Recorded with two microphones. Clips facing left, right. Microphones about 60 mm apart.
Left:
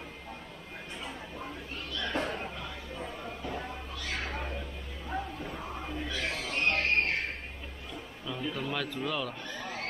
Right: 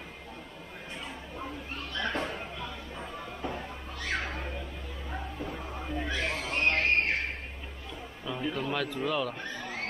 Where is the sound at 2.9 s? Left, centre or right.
Centre.